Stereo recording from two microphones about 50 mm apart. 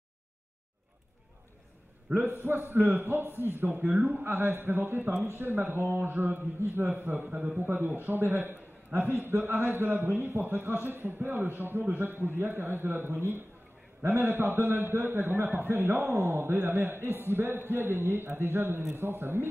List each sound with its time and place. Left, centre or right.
2.1 s a man's voice: right
2.4 s a man's voice: right
7.2 s a man's voice: right
18.8 s a man's voice: right